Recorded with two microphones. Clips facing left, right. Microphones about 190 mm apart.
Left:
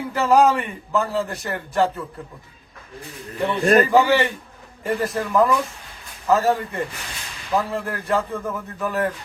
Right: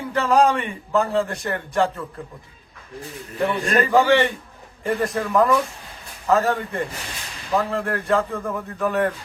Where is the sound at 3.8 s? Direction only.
5° left (ahead or behind).